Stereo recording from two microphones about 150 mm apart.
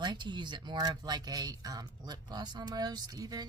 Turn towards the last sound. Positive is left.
turn(degrees=-25)  # may be behind; listen again after turning